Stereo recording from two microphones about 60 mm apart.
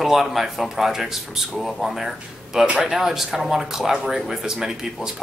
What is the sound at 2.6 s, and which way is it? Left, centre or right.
Speech, centre.